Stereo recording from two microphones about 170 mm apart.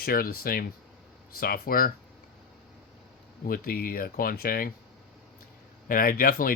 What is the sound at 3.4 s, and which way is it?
Speech, 60° left (ahead or behind).